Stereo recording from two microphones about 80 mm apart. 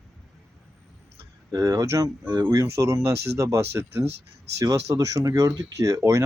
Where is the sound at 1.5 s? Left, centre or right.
Right.